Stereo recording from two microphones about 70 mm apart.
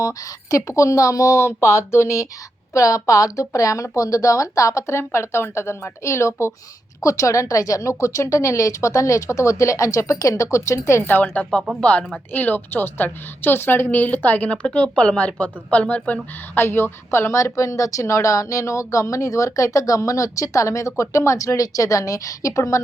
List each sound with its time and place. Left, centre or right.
0.0 s speech: left
11.1 s a woman's voice: centre
16.6 s speech: left